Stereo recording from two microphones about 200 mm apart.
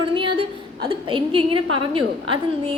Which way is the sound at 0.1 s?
25° right (ahead or behind).